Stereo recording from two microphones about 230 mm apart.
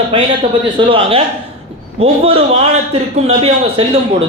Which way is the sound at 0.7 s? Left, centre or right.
Right.